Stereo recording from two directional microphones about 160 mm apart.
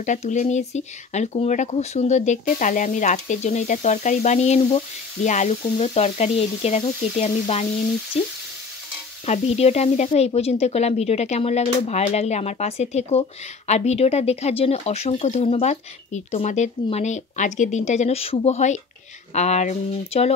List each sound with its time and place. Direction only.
0.0 s speech: 50° left (ahead or behind)
9.2 s speech: 40° left (ahead or behind)